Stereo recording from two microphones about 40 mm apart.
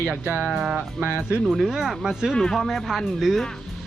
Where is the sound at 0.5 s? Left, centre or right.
Right.